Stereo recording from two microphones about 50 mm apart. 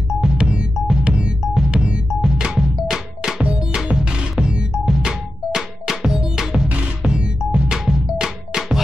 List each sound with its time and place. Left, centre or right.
0.2 s music: centre
6.7 s music: right